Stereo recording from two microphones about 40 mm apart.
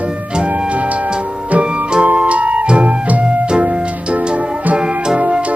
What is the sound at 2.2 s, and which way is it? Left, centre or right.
Music, right.